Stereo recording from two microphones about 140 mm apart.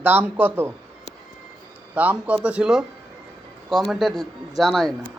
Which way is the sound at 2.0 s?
10° right (ahead or behind).